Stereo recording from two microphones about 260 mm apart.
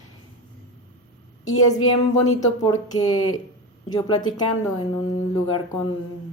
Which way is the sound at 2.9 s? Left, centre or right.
Centre.